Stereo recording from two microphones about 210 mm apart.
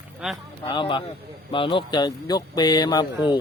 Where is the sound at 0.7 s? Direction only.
25° left (ahead or behind).